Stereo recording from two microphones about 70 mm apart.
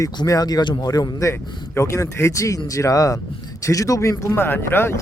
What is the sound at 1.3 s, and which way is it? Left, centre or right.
Speech, left.